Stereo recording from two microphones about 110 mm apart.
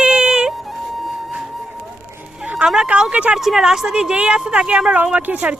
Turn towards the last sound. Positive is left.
turn(degrees=-15)  # may be behind; listen again after turning